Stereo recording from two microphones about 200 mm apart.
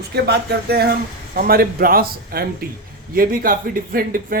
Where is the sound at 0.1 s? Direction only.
55° right (ahead or behind).